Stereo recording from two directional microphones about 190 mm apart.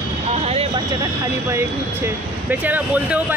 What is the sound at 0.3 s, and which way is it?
Vehicle, 35° right (ahead or behind).